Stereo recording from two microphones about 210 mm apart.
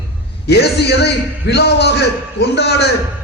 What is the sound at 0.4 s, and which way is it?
A man's voice, 50° left (ahead or behind).